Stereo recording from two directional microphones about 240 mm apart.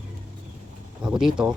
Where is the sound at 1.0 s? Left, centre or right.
Centre.